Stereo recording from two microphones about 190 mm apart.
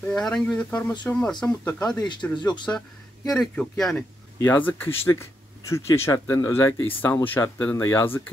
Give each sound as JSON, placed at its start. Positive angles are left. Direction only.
{"t": 0.0, "sound": "speech", "side_deg": 5}
{"t": 2.3, "sound": "speech", "side_deg": 25}
{"t": 3.3, "sound": "speech", "side_deg": 0}